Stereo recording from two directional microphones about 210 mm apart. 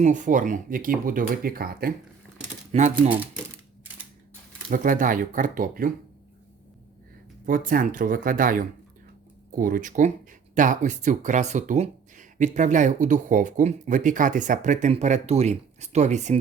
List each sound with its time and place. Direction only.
0.0 s speech: 35° right (ahead or behind)
2.7 s speech: 35° right (ahead or behind)
4.7 s speech: 40° right (ahead or behind)
7.4 s speech: 40° right (ahead or behind)